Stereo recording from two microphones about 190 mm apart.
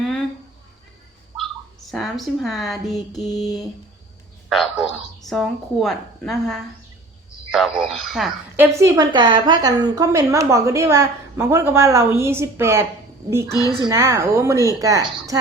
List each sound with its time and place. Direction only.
0.0 s a sound: 5° left (ahead or behind)
1.4 s speech: centre (ahead or behind)
5.3 s a woman's voice: centre (ahead or behind)
8.5 s a woman's voice: 15° right (ahead or behind)